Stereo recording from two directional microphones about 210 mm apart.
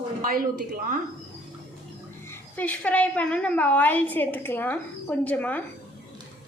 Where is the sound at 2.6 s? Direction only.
5° left (ahead or behind).